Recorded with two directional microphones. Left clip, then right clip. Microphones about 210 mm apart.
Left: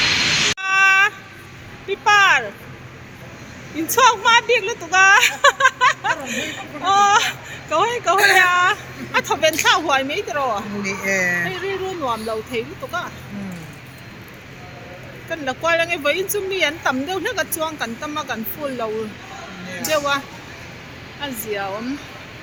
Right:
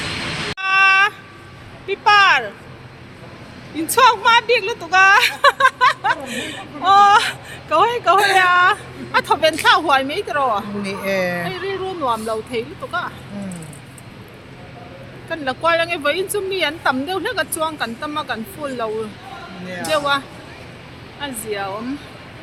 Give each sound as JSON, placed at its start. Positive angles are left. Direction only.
{"t": 0.6, "sound": "a sound", "side_deg": -5}
{"t": 3.9, "sound": "speech", "side_deg": -5}
{"t": 11.0, "sound": "speech", "side_deg": -40}
{"t": 11.4, "sound": "speech", "side_deg": -5}
{"t": 15.3, "sound": "speech", "side_deg": -5}
{"t": 19.9, "sound": "speech", "side_deg": 0}